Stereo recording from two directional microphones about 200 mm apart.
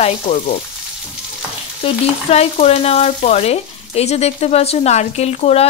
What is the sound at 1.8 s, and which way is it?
Frying, 30° left (ahead or behind).